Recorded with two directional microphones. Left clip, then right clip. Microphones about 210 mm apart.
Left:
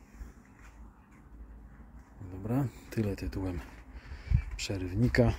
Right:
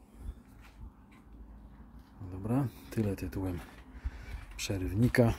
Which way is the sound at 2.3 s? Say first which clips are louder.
Even; centre (ahead or behind).